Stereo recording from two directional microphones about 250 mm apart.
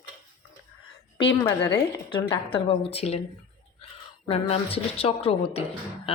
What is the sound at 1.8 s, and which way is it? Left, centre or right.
A woman's voice, centre.